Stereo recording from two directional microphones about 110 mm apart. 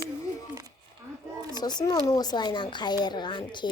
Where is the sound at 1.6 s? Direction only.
40° left (ahead or behind).